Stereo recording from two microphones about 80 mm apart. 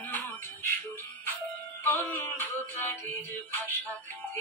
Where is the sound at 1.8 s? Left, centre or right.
Left.